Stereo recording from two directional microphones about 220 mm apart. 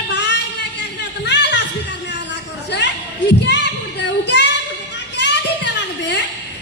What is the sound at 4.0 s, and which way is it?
Child singing, 55° left (ahead or behind).